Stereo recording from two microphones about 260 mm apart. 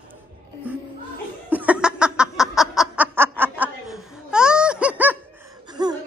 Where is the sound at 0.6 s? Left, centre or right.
Centre.